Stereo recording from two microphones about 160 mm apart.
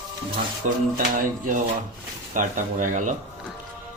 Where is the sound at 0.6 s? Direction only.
55° right (ahead or behind).